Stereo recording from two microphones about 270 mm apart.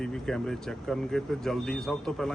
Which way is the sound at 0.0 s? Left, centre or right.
Centre.